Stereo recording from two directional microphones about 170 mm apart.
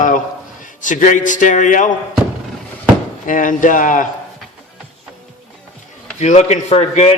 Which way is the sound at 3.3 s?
50° left (ahead or behind).